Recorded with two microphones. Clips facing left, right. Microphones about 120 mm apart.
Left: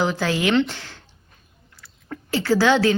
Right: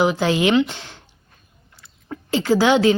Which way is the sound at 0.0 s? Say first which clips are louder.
Right 4 dB; 15° right (ahead or behind).